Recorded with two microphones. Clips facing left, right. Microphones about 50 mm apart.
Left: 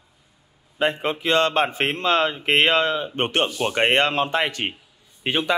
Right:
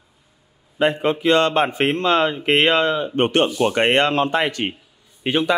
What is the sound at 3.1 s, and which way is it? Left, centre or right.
Speech, centre.